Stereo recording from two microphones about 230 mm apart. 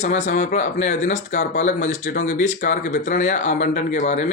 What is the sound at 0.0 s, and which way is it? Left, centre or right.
Speech, left.